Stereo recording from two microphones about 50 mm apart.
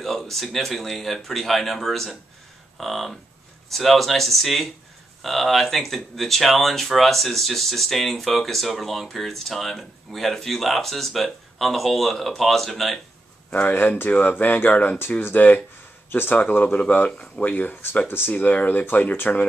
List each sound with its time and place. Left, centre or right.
0.0 s speech: centre
13.7 s speech: left